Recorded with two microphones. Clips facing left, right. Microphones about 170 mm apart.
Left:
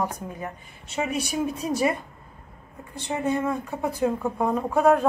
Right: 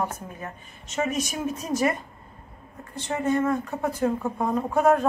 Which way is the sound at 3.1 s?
10° left (ahead or behind).